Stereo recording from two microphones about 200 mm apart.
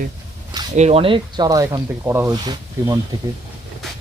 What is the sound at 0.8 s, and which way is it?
Speech, 30° right (ahead or behind).